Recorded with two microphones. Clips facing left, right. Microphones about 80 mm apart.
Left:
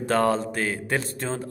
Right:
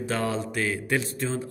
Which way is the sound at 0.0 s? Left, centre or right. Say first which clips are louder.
Left 6 dB; left.